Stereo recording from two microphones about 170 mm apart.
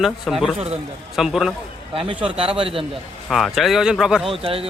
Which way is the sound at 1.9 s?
30° right (ahead or behind).